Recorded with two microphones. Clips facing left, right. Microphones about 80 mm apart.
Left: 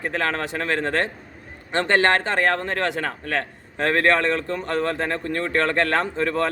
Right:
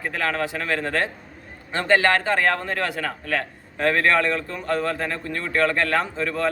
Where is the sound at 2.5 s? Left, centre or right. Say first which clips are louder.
Left 2 dB; left.